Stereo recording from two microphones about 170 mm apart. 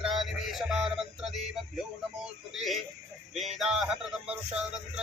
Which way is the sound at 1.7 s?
5° right (ahead or behind).